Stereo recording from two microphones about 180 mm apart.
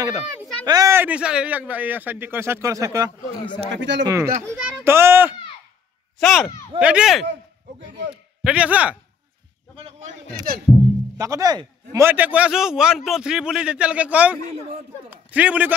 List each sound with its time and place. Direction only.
0.7 s a man's voice: 20° right (ahead or behind)
3.7 s speech: 75° right (ahead or behind)
4.0 s a man's voice: 15° right (ahead or behind)
6.1 s a man's voice: centre (ahead or behind)
10.5 s speech: 55° right (ahead or behind)
11.1 s a man's voice: 20° right (ahead or behind)